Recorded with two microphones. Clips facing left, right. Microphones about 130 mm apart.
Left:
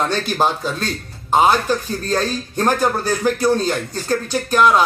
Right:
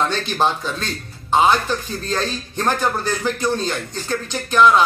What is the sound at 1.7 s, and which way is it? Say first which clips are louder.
Speech: left 4 dB; 40° left (ahead or behind).